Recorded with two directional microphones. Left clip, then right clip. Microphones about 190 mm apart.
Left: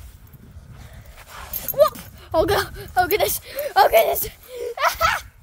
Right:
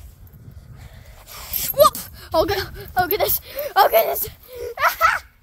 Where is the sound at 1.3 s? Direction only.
5° right (ahead or behind).